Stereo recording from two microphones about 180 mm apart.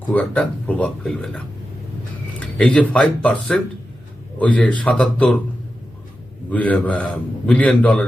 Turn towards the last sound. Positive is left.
turn(degrees=10)  # may be behind; listen again after turning